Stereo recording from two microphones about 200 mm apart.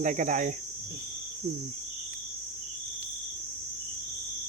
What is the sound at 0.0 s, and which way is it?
Speech, 40° right (ahead or behind).